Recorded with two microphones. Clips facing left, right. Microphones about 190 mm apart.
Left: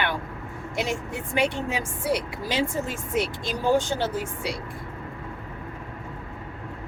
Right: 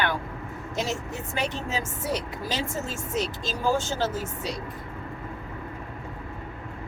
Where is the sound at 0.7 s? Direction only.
15° left (ahead or behind).